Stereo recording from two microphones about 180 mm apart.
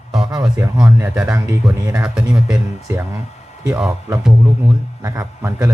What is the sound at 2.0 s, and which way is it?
Speech, 5° right (ahead or behind).